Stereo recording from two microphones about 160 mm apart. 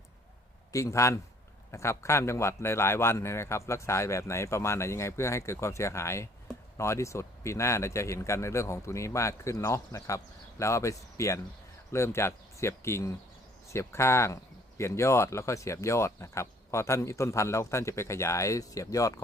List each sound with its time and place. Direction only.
0.7 s a man's voice: 20° left (ahead or behind)